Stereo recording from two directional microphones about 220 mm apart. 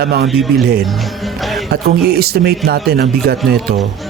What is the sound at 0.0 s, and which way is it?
Speech, 45° right (ahead or behind).